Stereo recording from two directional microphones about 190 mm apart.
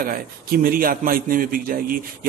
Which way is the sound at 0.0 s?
50° right (ahead or behind).